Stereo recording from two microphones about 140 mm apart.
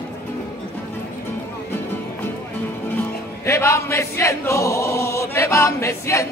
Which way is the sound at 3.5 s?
20° left (ahead or behind).